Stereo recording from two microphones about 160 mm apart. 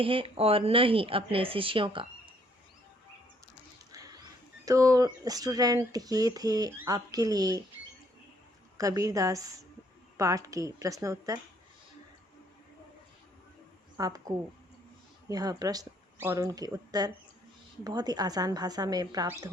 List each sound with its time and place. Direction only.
0.0 s speech: 35° right (ahead or behind)
3.9 s a sound: 20° right (ahead or behind)
4.6 s speech: 20° right (ahead or behind)
8.8 s speech: 20° right (ahead or behind)
13.9 s speech: 20° right (ahead or behind)